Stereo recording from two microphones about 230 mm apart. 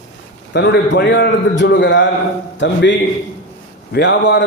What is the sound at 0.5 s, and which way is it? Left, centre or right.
A man's voice, left.